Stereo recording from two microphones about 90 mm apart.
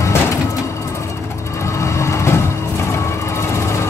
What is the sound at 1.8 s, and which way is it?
Vehicle, 30° left (ahead or behind).